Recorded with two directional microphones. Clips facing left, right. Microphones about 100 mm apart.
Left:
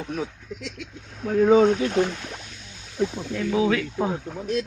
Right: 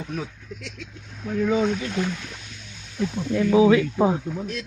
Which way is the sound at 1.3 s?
50° left (ahead or behind).